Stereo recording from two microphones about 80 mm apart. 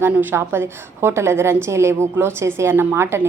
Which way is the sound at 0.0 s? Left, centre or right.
Right.